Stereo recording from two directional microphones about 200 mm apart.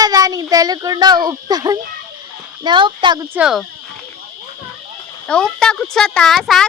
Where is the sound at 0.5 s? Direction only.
20° right (ahead or behind).